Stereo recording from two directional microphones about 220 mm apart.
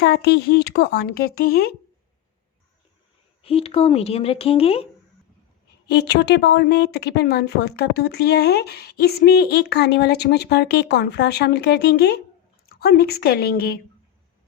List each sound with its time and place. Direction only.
0.0 s speech: 50° left (ahead or behind)
3.4 s speech: 25° left (ahead or behind)
5.9 s speech: 50° left (ahead or behind)